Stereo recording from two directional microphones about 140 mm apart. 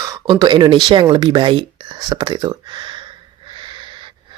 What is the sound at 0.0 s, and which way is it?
Speech, 25° right (ahead or behind).